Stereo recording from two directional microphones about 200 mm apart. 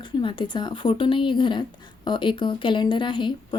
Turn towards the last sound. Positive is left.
turn(degrees=25)  # may be behind; listen again after turning